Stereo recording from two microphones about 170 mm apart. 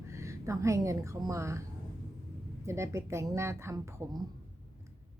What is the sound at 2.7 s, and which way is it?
Speech, 15° right (ahead or behind).